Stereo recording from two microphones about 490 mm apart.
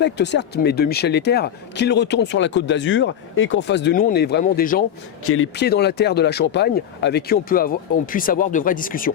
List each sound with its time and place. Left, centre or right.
0.0 s speech: left